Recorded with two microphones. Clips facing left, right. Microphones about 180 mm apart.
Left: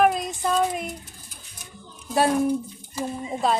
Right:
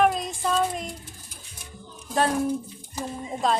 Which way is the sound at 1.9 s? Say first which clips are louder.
Left 3 dB; 10° left (ahead or behind).